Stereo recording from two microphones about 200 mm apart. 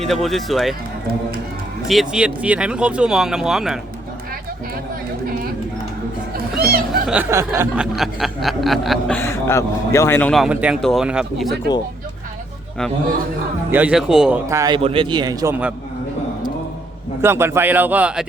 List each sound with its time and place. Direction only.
0.0 s speech: centre (ahead or behind)
1.9 s speech: centre (ahead or behind)
6.3 s music: 50° right (ahead or behind)
7.1 s a man's voice: 10° right (ahead or behind)
7.9 s speech: centre (ahead or behind)
13.7 s speech: 10° right (ahead or behind)
14.5 s a man's voice: 15° right (ahead or behind)
14.8 s a man's voice: 25° right (ahead or behind); by 15.7 s 10° right (ahead or behind)
17.2 s a man's voice: 10° right (ahead or behind)